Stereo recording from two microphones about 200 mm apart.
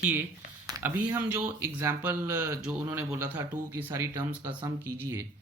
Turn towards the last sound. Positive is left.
turn(degrees=-10)  # may be behind; listen again after turning